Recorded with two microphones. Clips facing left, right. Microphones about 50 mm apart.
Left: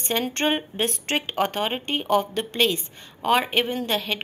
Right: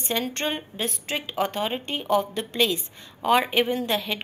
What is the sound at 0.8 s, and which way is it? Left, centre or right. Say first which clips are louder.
Speech: left 4 dB; left.